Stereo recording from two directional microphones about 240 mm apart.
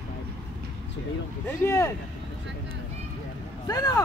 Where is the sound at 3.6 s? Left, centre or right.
Centre.